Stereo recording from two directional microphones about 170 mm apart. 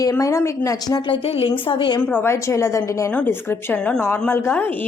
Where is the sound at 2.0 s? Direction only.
10° left (ahead or behind).